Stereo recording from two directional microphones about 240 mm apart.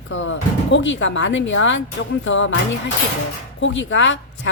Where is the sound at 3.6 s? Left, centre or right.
Left.